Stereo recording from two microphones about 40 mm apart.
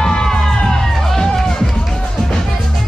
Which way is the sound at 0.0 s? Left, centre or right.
Centre.